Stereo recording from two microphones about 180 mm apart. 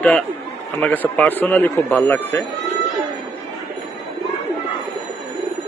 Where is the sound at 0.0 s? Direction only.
5° left (ahead or behind).